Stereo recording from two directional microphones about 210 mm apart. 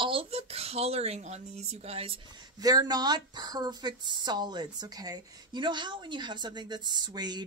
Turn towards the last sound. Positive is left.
turn(degrees=-20)  # may be behind; listen again after turning